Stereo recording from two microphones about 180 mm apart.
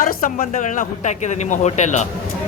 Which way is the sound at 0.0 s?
50° left (ahead or behind).